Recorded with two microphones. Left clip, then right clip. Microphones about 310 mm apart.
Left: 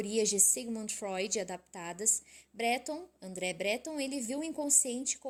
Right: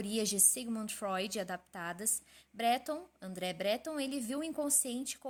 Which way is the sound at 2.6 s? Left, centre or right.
Right.